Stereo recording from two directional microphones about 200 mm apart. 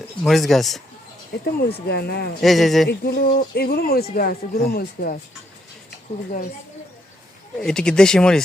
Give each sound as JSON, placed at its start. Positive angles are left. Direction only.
{"t": 0.2, "sound": "speech", "side_deg": 0}
{"t": 1.5, "sound": "speech", "side_deg": 50}
{"t": 2.4, "sound": "speech", "side_deg": 0}
{"t": 3.0, "sound": "speech", "side_deg": 50}
{"t": 7.6, "sound": "speech", "side_deg": 5}